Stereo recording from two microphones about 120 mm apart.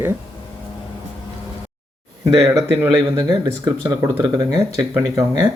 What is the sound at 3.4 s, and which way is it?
Speech, 30° right (ahead or behind).